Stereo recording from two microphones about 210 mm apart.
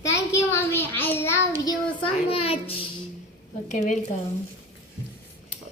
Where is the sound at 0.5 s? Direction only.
10° left (ahead or behind).